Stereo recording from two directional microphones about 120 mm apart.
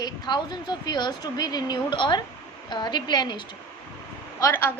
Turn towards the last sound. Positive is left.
turn(degrees=20)  # may be behind; listen again after turning